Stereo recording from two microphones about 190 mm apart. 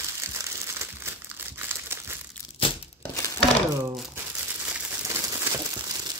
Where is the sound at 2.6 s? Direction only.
30° left (ahead or behind).